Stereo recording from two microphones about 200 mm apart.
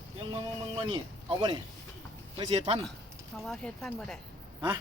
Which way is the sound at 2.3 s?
30° right (ahead or behind).